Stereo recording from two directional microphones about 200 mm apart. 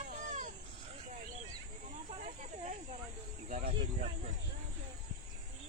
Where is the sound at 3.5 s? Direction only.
45° right (ahead or behind).